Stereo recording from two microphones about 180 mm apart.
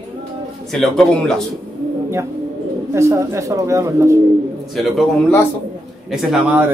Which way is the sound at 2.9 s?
15° right (ahead or behind).